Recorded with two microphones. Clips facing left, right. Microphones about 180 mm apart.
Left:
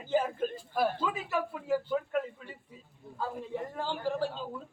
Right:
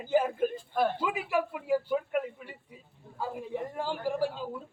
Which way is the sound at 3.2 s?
10° right (ahead or behind).